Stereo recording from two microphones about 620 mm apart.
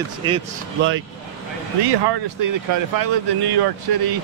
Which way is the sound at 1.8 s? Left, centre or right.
Right.